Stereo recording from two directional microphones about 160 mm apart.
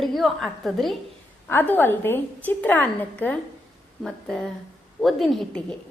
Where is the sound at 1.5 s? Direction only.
10° left (ahead or behind).